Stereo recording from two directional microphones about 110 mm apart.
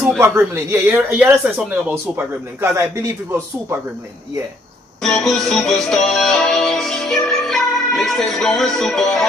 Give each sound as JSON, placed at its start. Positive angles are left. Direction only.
{"t": 0.2, "sound": "speech", "side_deg": -20}
{"t": 5.0, "sound": "music", "side_deg": 5}